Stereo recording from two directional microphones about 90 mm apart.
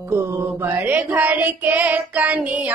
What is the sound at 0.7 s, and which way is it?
Child singing, 20° right (ahead or behind).